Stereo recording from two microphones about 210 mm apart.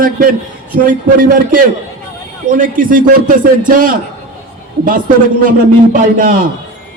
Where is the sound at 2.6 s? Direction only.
40° right (ahead or behind).